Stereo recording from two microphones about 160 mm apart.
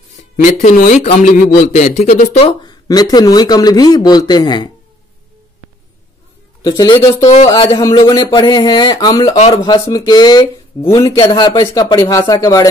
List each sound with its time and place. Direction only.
0.1 s a man's voice: 50° left (ahead or behind)
2.4 s speech: 25° left (ahead or behind)
6.6 s speech: 25° left (ahead or behind)